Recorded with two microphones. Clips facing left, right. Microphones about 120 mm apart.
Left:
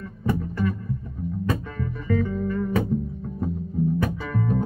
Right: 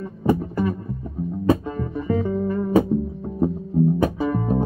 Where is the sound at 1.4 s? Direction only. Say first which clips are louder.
Right 9 dB; 30° right (ahead or behind).